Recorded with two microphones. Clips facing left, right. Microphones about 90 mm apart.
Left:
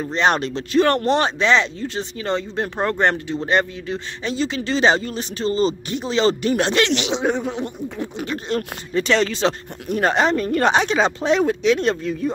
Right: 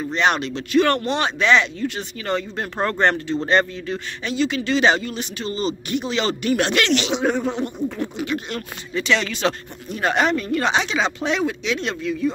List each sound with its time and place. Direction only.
0.0 s speech: 35° left (ahead or behind); by 4.0 s 15° left (ahead or behind)
4.2 s speech: 30° left (ahead or behind)
8.2 s speech: 35° left (ahead or behind)
10.4 s speech: 45° left (ahead or behind)